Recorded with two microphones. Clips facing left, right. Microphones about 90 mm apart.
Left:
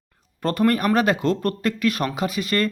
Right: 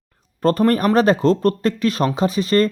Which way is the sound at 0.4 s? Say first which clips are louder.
Right 4 dB; 35° right (ahead or behind).